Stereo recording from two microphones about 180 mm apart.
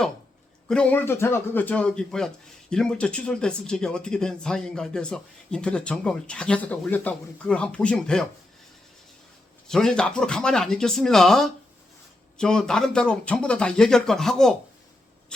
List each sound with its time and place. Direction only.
0.7 s speech: 5° left (ahead or behind)
9.6 s speech: 5° left (ahead or behind)